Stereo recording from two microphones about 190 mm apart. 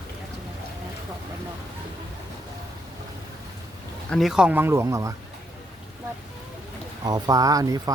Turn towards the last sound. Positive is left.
turn(degrees=-20)  # may be behind; listen again after turning